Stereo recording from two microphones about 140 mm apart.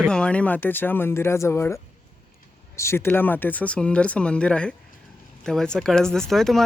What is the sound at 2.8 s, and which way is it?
Speech, 20° left (ahead or behind).